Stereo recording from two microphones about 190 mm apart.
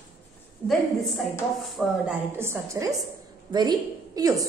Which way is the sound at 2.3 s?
15° right (ahead or behind).